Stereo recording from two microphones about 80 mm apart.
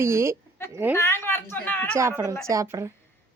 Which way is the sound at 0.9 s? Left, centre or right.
Left.